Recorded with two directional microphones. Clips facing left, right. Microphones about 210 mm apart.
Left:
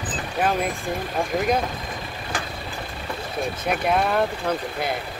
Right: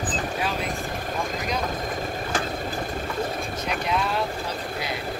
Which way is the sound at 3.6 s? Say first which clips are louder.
Left 5 dB; 55° left (ahead or behind).